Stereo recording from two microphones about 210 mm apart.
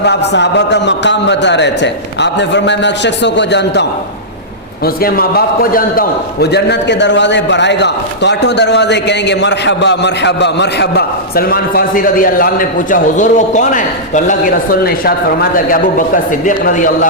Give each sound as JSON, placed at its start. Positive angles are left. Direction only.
{"t": 0.0, "sound": "a man's voice", "side_deg": 55}
{"t": 5.0, "sound": "a man's voice", "side_deg": 45}